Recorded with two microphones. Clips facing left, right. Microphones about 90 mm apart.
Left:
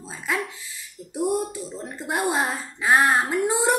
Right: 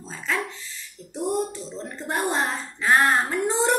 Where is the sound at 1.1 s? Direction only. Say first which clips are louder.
Left 1 dB; 10° left (ahead or behind).